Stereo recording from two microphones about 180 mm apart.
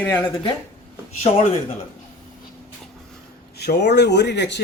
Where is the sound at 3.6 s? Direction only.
65° left (ahead or behind).